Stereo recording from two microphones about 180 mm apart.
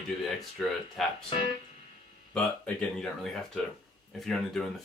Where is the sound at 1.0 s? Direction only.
Centre (ahead or behind).